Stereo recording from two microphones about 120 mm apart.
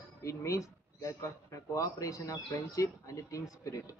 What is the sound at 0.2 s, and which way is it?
Speech, 25° left (ahead or behind).